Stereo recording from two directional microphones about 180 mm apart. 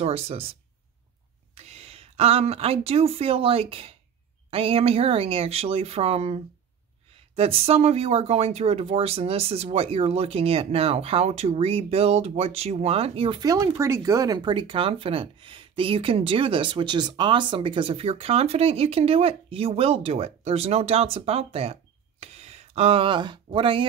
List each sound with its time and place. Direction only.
0.0 s speech: 35° right (ahead or behind)